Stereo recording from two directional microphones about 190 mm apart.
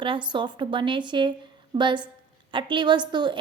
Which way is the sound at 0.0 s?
25° right (ahead or behind).